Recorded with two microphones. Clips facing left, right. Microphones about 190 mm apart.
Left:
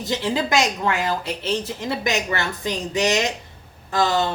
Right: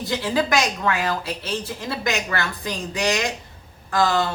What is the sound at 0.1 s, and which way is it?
A woman's voice, 20° left (ahead or behind).